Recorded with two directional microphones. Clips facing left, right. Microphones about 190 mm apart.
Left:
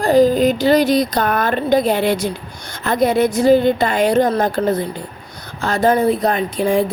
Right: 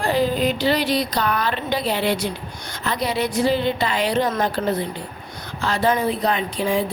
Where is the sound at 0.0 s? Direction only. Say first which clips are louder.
Left 8 dB; 40° left (ahead or behind).